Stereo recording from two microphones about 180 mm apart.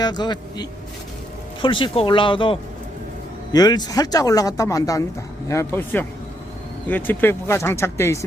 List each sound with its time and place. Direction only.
0.0 s speech: 25° left (ahead or behind)